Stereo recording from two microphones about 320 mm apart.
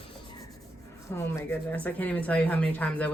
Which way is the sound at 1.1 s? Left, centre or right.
Centre.